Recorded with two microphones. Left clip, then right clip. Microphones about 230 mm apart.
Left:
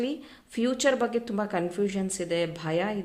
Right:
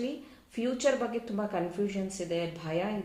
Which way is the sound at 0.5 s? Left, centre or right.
Left.